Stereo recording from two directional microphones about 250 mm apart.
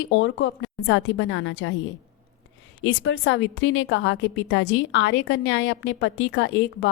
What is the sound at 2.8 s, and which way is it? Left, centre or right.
A woman's voice, left.